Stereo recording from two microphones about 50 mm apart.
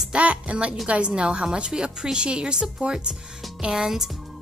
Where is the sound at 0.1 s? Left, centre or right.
Right.